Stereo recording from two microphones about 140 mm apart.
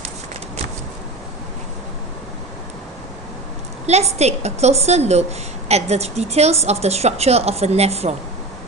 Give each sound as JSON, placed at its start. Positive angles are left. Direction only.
{"t": 3.8, "sound": "a woman's voice", "side_deg": -50}